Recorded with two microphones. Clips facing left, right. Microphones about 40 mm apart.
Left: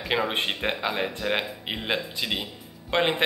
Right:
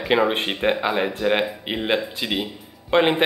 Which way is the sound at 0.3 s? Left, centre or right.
Centre.